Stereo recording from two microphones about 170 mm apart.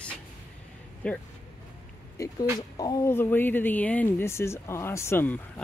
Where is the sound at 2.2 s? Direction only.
20° left (ahead or behind).